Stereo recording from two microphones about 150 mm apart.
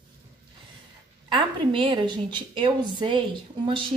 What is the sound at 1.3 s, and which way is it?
A woman's voice, 30° right (ahead or behind).